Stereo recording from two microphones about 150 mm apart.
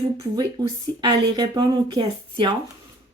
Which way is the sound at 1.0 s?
30° right (ahead or behind).